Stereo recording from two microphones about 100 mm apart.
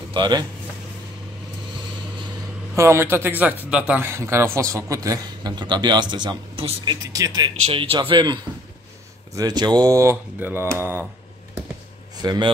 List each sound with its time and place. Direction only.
0.1 s speech: 45° right (ahead or behind)
2.7 s speech: 30° right (ahead or behind); by 4.0 s 10° right (ahead or behind)
4.0 s a man's voice: 25° right (ahead or behind)
5.6 s a man's voice: 50° right (ahead or behind)
7.7 s speech: 65° right (ahead or behind)
9.3 s a man's voice: 40° right (ahead or behind)
10.4 s speech: 20° right (ahead or behind)
12.2 s a man's voice: 40° right (ahead or behind)